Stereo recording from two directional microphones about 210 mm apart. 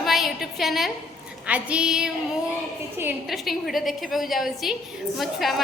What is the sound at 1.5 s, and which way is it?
A woman's voice, 5° right (ahead or behind).